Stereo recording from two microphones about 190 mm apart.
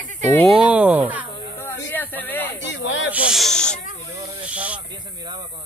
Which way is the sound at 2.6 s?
75° left (ahead or behind).